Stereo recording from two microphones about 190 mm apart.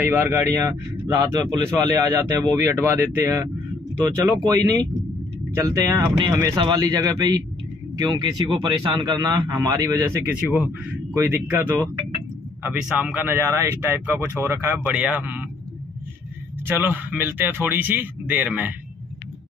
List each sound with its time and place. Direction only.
0.1 s a man's voice: 10° right (ahead or behind)
5.6 s a man's voice: 15° right (ahead or behind)
16.6 s a man's voice: 10° right (ahead or behind)